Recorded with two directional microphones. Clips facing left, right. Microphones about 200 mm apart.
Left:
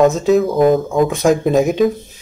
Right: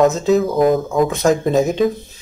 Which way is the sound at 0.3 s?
Centre (ahead or behind).